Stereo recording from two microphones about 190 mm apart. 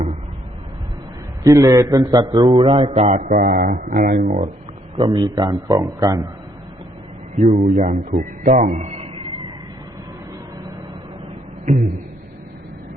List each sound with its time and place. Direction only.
1.5 s a man's voice: 15° right (ahead or behind); by 3.2 s 35° right (ahead or behind)
3.2 s speech: 55° right (ahead or behind)
4.2 s a man's voice: 30° right (ahead or behind)
7.3 s a man's voice: 30° right (ahead or behind)
11.6 s speech: 40° right (ahead or behind)